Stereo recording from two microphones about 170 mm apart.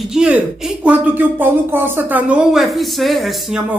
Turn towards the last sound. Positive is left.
turn(degrees=0)  # may be behind; listen again after turning